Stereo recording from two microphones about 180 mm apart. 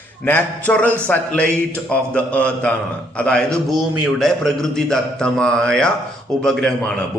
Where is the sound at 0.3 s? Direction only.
10° left (ahead or behind).